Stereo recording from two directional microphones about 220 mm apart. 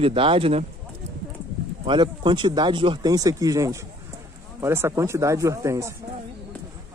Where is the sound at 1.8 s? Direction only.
20° right (ahead or behind).